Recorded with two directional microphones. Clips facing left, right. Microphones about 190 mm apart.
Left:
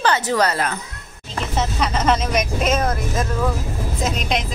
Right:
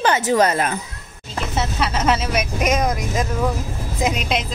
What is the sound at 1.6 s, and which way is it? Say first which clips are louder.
Speech: left 1 dB; 5° right (ahead or behind).